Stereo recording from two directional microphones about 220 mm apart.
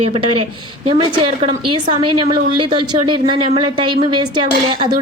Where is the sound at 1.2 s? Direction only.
25° right (ahead or behind).